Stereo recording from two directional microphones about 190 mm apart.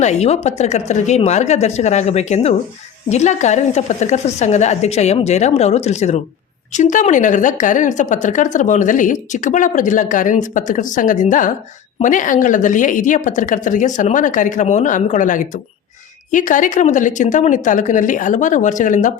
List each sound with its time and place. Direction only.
0.0 s a woman's voice: 35° left (ahead or behind)